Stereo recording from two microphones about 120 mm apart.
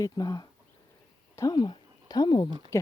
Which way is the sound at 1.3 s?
30° left (ahead or behind).